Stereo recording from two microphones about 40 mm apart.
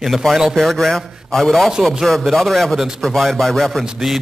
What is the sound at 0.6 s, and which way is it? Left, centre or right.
A man's voice, centre.